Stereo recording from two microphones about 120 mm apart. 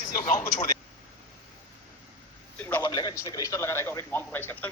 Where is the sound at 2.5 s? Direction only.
15° left (ahead or behind).